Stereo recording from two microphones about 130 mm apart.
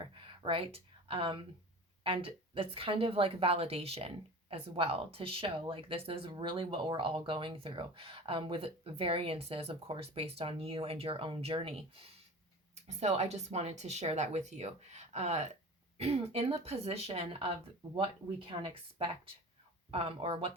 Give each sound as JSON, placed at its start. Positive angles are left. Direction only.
{"t": 0.0, "sound": "a sound", "side_deg": -40}
{"t": 2.0, "sound": "a woman's voice", "side_deg": -45}
{"t": 12.7, "sound": "a woman's voice", "side_deg": -60}